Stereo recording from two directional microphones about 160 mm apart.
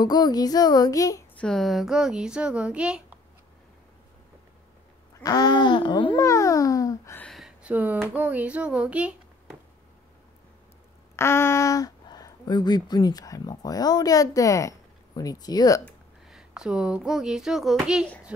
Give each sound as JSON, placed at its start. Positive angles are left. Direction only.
{"t": 0.0, "sound": "child singing", "side_deg": 25}
{"t": 1.4, "sound": "speech", "side_deg": 0}
{"t": 5.2, "sound": "speech", "side_deg": 25}
{"t": 7.2, "sound": "a child's voice", "side_deg": 0}
{"t": 11.1, "sound": "speech", "side_deg": 15}
{"t": 15.8, "sound": "speech", "side_deg": 0}